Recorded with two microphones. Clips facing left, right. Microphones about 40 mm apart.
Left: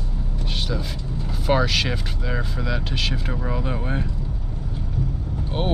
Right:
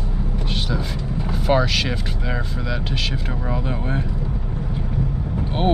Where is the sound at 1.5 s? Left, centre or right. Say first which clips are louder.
Right 1 dB; centre.